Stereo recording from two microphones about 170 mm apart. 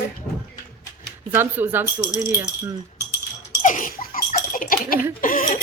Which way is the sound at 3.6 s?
50° left (ahead or behind).